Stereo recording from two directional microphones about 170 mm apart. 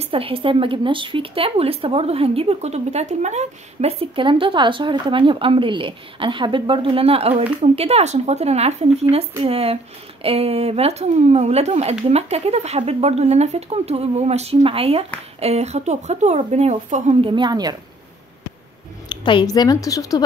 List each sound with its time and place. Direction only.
0.0 s speech: 35° right (ahead or behind)
19.0 s a woman's voice: 30° left (ahead or behind)